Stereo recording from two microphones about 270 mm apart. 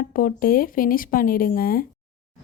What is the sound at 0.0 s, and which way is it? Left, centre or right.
A woman's voice, left.